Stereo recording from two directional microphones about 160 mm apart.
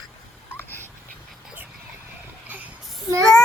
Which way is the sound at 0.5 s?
15° left (ahead or behind).